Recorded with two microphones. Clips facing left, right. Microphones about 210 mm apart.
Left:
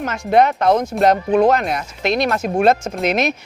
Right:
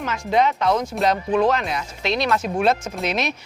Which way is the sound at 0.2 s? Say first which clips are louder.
Left 5 dB; 60° left (ahead or behind).